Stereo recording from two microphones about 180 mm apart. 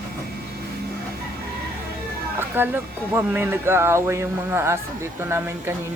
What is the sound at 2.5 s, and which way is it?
Speech, 10° right (ahead or behind).